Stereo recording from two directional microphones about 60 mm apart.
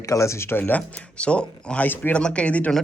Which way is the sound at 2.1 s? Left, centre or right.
Centre.